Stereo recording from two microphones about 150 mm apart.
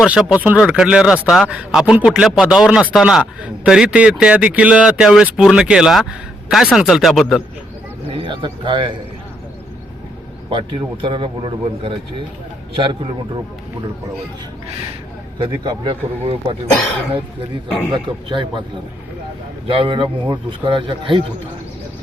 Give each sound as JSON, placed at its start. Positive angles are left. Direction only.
{"t": 0.0, "sound": "a man's voice", "side_deg": -5}
{"t": 8.1, "sound": "speech", "side_deg": -35}
{"t": 10.5, "sound": "speech", "side_deg": -35}
{"t": 15.4, "sound": "speech", "side_deg": -30}
{"t": 17.9, "sound": "speech", "side_deg": -30}
{"t": 19.6, "sound": "speech", "side_deg": -35}